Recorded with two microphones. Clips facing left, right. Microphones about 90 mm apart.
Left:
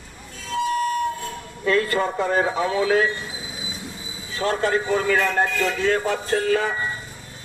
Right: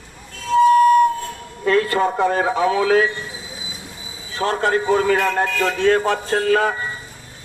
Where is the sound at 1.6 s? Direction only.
45° right (ahead or behind).